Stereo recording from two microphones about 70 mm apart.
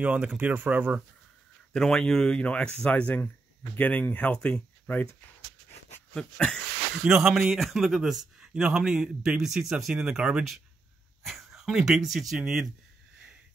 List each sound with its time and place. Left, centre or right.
0.0 s speech: centre
1.7 s speech: centre
6.1 s speech: centre
7.1 s a man's voice: centre